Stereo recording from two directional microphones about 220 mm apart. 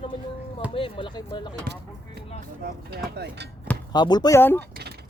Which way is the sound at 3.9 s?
20° left (ahead or behind).